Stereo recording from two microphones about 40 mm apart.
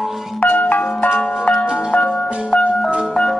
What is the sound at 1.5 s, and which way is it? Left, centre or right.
Music, left.